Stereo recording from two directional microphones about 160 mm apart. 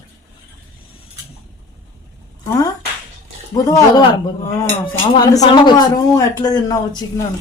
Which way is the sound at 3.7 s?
25° left (ahead or behind).